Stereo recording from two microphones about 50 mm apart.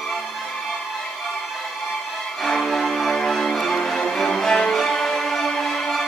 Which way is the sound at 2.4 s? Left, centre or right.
Centre.